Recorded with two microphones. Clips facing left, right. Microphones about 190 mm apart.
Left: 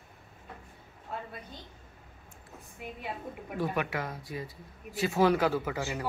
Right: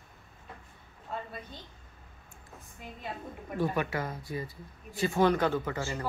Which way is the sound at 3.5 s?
5° left (ahead or behind).